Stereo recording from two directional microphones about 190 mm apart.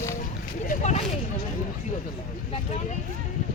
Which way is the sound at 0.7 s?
35° left (ahead or behind).